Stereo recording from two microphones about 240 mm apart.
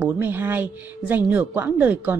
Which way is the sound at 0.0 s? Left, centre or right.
Centre.